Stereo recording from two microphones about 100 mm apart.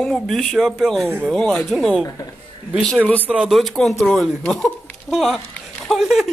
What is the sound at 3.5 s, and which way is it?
Speech, centre (ahead or behind).